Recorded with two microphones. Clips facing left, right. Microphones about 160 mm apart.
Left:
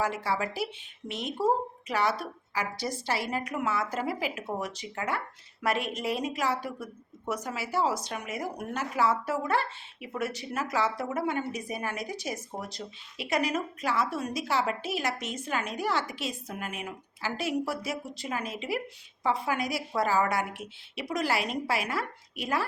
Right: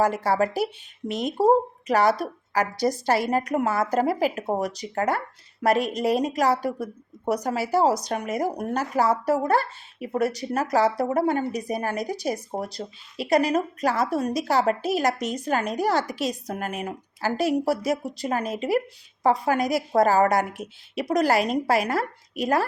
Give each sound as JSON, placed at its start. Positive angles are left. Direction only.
{"t": 0.0, "sound": "a woman's voice", "side_deg": -40}